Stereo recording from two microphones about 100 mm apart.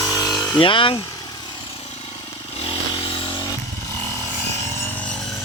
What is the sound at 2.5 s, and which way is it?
Motorcycle, 75° left (ahead or behind).